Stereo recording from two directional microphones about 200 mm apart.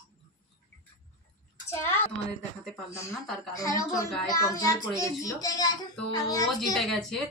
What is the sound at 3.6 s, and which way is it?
Speech, 15° left (ahead or behind).